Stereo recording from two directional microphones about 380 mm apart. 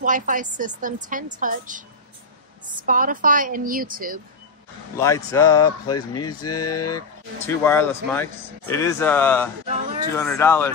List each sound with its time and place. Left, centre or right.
0.0 s a woman's voice: centre
2.8 s a woman's voice: right
5.0 s speech: centre
6.6 s speech: left
7.0 s speech: centre
9.7 s a sound: centre
10.1 s speech: centre